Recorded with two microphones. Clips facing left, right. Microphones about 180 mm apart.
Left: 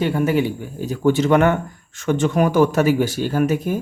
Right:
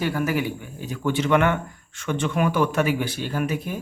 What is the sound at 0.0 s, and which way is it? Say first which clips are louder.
Speech: left 5 dB; 25° left (ahead or behind).